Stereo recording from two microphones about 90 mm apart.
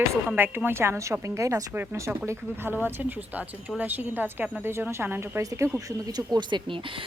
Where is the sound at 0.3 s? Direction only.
25° right (ahead or behind).